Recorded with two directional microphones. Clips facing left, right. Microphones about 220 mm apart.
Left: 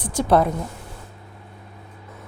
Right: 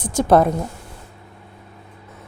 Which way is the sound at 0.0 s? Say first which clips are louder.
Right 3 dB; 45° right (ahead or behind).